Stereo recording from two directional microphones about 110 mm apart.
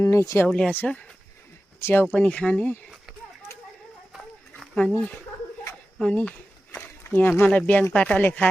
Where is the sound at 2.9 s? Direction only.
5° right (ahead or behind).